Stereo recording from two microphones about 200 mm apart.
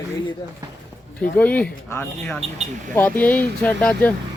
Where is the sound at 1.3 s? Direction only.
5° left (ahead or behind).